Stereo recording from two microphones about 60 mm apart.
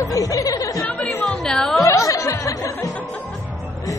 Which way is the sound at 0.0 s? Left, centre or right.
Left.